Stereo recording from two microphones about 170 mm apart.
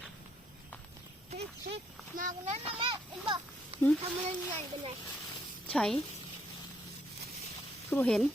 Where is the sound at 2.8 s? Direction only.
30° right (ahead or behind).